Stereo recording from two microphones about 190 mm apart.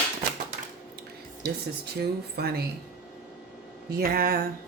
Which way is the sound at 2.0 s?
55° right (ahead or behind).